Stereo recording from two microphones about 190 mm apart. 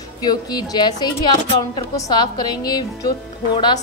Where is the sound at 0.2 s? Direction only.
20° left (ahead or behind).